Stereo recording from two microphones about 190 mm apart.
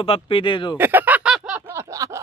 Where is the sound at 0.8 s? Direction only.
10° right (ahead or behind).